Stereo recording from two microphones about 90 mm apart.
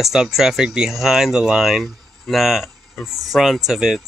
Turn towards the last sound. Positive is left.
turn(degrees=-5)  # may be behind; listen again after turning